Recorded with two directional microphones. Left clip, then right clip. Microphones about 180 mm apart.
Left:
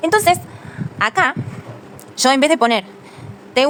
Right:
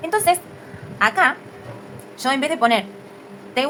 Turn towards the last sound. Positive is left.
turn(degrees=65)  # may be behind; listen again after turning